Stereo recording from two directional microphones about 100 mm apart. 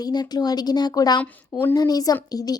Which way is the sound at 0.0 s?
45° left (ahead or behind).